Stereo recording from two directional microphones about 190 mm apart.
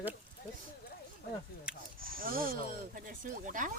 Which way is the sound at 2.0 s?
50° right (ahead or behind).